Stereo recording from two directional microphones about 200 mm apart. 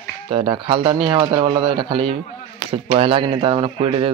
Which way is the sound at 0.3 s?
25° right (ahead or behind).